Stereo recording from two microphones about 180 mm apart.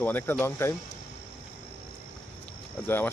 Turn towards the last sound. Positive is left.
turn(degrees=10)  # may be behind; listen again after turning